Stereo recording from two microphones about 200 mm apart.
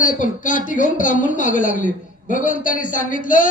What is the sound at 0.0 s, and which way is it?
Speech, 40° left (ahead or behind).